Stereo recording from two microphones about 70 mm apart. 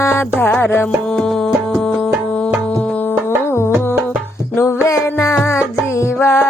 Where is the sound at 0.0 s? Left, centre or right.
Left.